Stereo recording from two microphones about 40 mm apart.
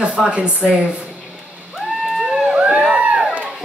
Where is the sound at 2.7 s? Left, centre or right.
Right.